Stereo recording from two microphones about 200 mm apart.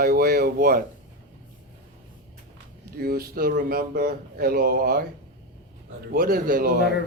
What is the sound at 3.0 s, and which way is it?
A man's voice, 50° right (ahead or behind).